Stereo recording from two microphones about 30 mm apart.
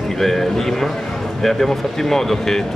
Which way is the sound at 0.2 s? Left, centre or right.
Centre.